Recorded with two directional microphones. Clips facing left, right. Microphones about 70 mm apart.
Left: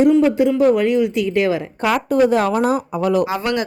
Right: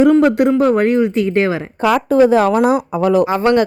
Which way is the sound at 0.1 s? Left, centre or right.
Right.